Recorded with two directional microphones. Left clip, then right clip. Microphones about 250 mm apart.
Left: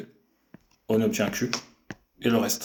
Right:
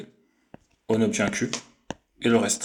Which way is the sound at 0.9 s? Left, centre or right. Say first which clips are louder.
Right 1 dB; right.